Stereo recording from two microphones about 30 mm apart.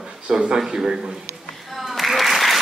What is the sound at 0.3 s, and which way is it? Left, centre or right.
Speech, right.